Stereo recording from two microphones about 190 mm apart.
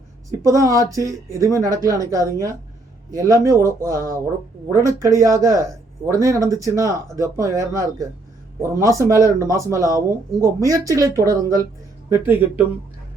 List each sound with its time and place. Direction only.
0.3 s speech: 15° right (ahead or behind)